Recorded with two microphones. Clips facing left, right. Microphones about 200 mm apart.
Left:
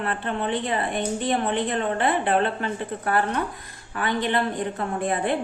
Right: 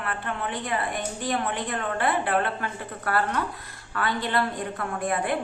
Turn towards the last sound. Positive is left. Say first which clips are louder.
# left 2 dB
turn(degrees=25)  # may be behind; listen again after turning